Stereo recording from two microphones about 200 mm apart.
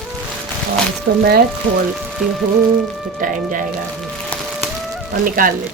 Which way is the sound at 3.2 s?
40° right (ahead or behind).